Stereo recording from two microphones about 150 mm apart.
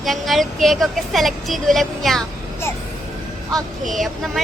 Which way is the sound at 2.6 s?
15° left (ahead or behind).